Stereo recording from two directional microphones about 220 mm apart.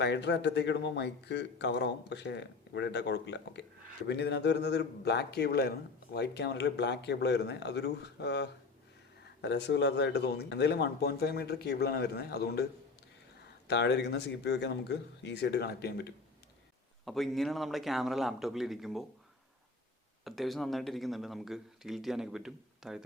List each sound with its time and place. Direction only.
0.0 s a man's voice: 50° left (ahead or behind)
13.7 s a man's voice: 50° left (ahead or behind)
17.1 s speech: centre (ahead or behind)
20.2 s speech: centre (ahead or behind)